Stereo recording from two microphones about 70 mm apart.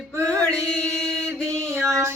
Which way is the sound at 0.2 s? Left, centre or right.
Right.